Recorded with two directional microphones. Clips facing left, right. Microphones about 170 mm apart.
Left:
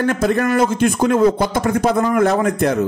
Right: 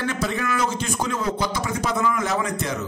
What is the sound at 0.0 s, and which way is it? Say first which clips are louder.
A man's voice: left 9 dB; 50° left (ahead or behind).